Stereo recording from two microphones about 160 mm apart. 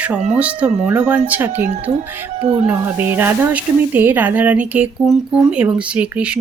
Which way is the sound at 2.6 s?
10° right (ahead or behind).